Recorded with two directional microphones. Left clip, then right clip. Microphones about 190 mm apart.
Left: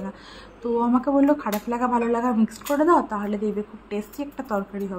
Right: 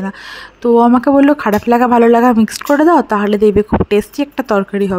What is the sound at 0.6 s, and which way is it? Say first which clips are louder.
Speech: right 13 dB; 45° right (ahead or behind).